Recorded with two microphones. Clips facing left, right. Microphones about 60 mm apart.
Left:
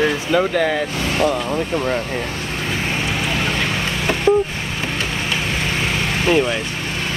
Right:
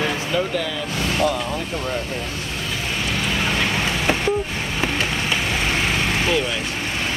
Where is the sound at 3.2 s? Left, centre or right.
Centre.